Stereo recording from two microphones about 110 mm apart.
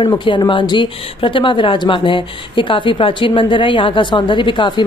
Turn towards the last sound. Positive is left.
turn(degrees=45)  # may be behind; listen again after turning